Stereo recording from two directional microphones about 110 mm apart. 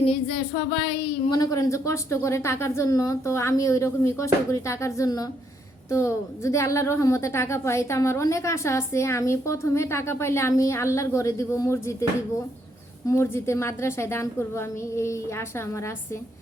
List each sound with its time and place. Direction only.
0.0 s a woman's voice: 55° left (ahead or behind); by 12.0 s 25° left (ahead or behind)
13.1 s a woman's voice: 25° left (ahead or behind)